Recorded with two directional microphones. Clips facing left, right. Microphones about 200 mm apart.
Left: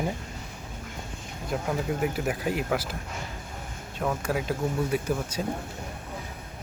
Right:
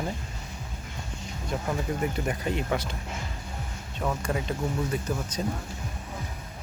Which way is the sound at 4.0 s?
5° left (ahead or behind).